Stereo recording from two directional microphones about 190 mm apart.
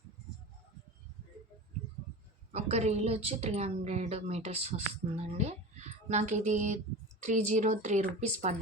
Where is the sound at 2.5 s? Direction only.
35° right (ahead or behind).